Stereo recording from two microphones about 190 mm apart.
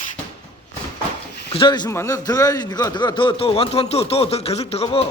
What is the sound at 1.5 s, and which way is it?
A man's voice, 25° left (ahead or behind).